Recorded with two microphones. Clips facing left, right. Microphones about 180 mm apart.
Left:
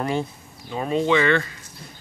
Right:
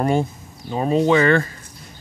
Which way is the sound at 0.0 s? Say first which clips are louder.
Right 5 dB; 45° right (ahead or behind).